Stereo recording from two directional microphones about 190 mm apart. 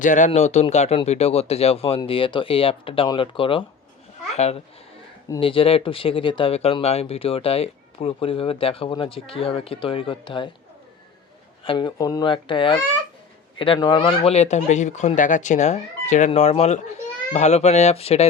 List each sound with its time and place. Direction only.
0.0 s speech: 40° left (ahead or behind); by 10.5 s 25° left (ahead or behind)
11.6 s speech: 25° left (ahead or behind)